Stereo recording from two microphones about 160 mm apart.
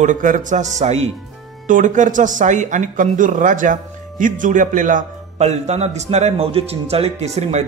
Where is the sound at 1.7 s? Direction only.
55° right (ahead or behind).